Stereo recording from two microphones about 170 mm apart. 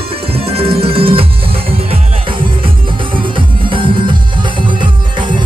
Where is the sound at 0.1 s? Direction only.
35° right (ahead or behind).